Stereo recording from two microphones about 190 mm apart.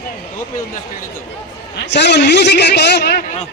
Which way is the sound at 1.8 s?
65° left (ahead or behind).